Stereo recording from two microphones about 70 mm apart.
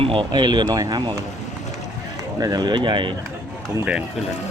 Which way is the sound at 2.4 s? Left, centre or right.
Right.